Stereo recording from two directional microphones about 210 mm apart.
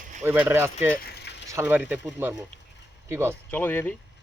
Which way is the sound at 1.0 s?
50° left (ahead or behind).